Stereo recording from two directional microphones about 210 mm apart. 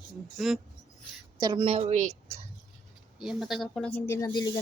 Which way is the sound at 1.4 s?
20° right (ahead or behind).